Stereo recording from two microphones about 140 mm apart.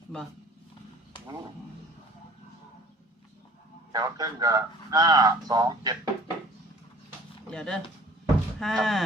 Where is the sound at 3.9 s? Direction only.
25° right (ahead or behind).